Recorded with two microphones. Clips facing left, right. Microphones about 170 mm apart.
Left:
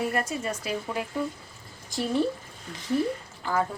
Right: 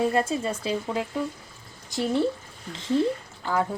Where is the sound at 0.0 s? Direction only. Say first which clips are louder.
Right 5 dB; 25° right (ahead or behind).